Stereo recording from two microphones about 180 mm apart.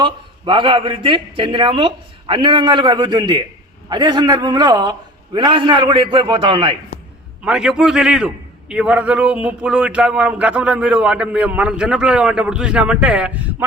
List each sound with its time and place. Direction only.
0.0 s speech: 25° right (ahead or behind)
7.4 s speech: 5° right (ahead or behind)